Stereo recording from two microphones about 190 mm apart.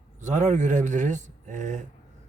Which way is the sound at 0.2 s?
40° right (ahead or behind).